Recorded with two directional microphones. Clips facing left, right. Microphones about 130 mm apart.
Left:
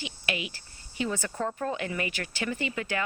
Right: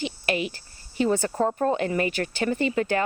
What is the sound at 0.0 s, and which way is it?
A woman's voice, 40° right (ahead or behind).